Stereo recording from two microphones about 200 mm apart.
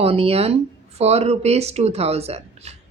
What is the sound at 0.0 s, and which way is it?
Speech, 30° right (ahead or behind).